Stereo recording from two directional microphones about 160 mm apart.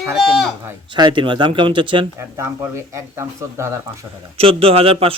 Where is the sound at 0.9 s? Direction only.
30° right (ahead or behind).